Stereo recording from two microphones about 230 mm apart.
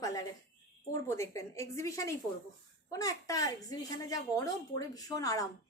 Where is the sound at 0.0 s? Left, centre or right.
Centre.